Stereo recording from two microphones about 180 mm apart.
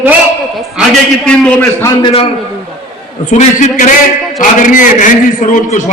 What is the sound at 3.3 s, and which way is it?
A man's voice, 45° left (ahead or behind).